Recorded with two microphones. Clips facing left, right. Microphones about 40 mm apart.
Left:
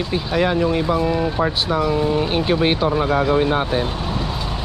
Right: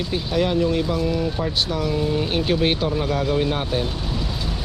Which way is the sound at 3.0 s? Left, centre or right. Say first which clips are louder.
Left 4 dB; left.